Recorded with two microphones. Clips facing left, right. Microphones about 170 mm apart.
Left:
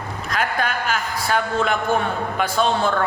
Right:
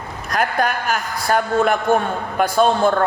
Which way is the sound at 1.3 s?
45° right (ahead or behind).